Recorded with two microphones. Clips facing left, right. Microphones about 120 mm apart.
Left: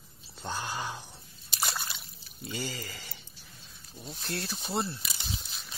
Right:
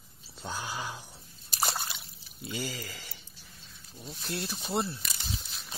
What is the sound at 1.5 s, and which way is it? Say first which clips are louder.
Slosh: right 2 dB; 35° right (ahead or behind).